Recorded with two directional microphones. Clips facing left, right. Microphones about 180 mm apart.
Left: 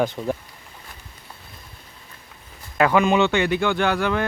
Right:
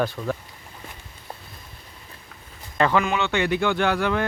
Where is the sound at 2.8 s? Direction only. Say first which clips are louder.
Left 2 dB; 10° left (ahead or behind).